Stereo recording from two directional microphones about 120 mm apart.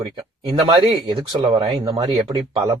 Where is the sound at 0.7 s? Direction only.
40° right (ahead or behind).